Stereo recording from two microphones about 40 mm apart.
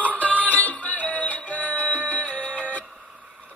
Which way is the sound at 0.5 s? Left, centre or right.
Left.